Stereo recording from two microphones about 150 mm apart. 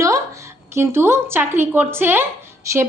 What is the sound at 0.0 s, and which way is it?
A woman's voice, 20° right (ahead or behind).